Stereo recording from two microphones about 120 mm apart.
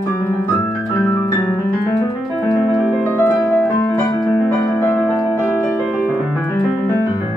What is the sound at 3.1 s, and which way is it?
Music, 15° left (ahead or behind).